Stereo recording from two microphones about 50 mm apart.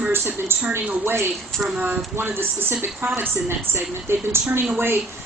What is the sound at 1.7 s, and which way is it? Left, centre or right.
A woman's voice, right.